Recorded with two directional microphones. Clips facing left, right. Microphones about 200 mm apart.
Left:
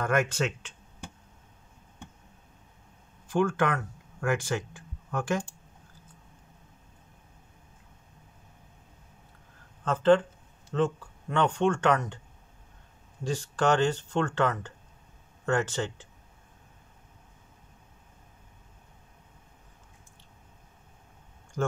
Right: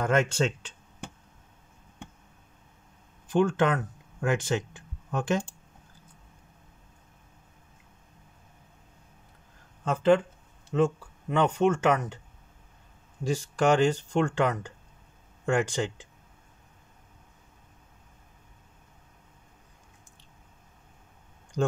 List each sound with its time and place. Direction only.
0.0 s speech: 25° right (ahead or behind)
3.3 s speech: 20° right (ahead or behind)
9.8 s speech: 10° right (ahead or behind)
13.2 s speech: 10° right (ahead or behind)
21.6 s speech: 20° right (ahead or behind)